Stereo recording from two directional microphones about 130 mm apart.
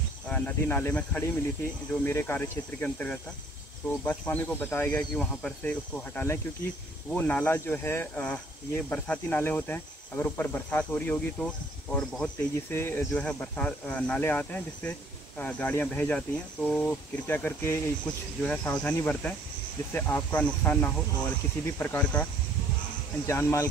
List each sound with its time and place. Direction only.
0.3 s speech: 15° left (ahead or behind)
23.2 s speech: 20° left (ahead or behind)